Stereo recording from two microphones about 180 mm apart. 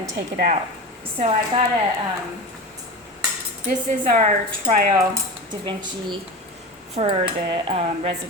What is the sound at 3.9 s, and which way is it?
Speech, 40° right (ahead or behind).